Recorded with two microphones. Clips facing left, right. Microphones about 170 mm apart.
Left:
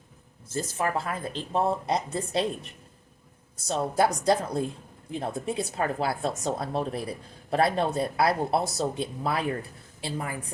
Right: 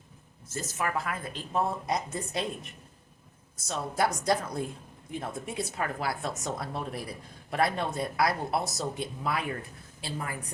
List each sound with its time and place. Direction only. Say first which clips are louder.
0.4 s speech: left 4 dB; 30° left (ahead or behind)
3.7 s a woman's voice: left 5 dB; 30° left (ahead or behind)